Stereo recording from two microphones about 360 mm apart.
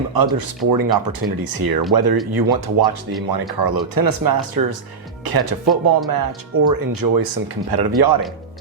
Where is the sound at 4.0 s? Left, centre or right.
Right.